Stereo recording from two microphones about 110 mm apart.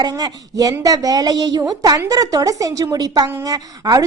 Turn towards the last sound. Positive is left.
turn(degrees=-35)  # may be behind; listen again after turning